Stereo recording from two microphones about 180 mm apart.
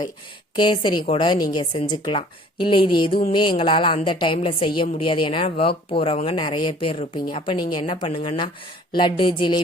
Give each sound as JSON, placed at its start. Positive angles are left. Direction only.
{"t": 0.5, "sound": "a woman's voice", "side_deg": 25}